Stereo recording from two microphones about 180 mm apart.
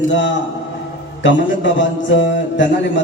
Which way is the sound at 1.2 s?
90° left.